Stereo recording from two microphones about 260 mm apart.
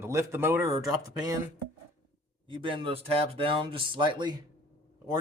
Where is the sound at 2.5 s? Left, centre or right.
Centre.